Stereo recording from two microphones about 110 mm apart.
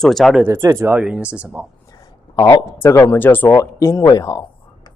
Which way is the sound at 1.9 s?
35° left (ahead or behind).